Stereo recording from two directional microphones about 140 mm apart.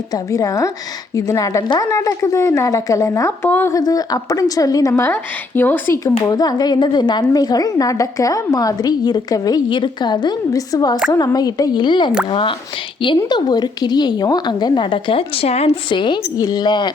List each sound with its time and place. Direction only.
0.1 s a woman's voice: 25° left (ahead or behind); by 15.8 s 50° left (ahead or behind)
15.9 s a woman's voice: 35° left (ahead or behind)